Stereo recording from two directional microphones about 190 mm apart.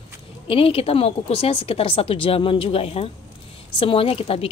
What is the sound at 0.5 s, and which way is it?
A woman's voice, 30° left (ahead or behind).